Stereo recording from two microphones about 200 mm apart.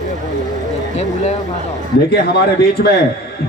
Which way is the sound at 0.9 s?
35° left (ahead or behind).